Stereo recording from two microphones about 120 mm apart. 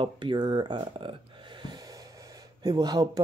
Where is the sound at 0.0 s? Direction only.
40° right (ahead or behind).